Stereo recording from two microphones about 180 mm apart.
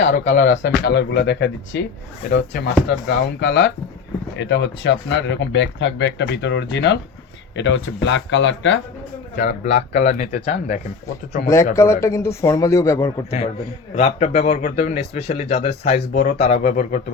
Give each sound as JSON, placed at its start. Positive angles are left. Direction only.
{"t": 0.0, "sound": "speech", "side_deg": 85}
{"t": 9.7, "sound": "speech", "side_deg": 40}
{"t": 11.4, "sound": "a man's voice", "side_deg": 15}
{"t": 13.9, "sound": "speech", "side_deg": 35}